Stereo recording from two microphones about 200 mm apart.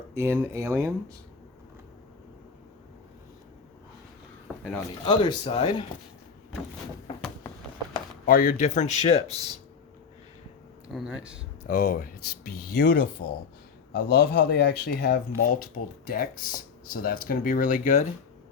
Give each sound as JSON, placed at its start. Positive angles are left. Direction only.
{"t": 0.1, "sound": "speech", "side_deg": -10}
{"t": 4.5, "sound": "a sound", "side_deg": 5}
{"t": 5.0, "sound": "a man's voice", "side_deg": 25}
{"t": 8.3, "sound": "speech", "side_deg": 40}
{"t": 10.8, "sound": "speech", "side_deg": -5}
{"t": 11.6, "sound": "speech", "side_deg": 45}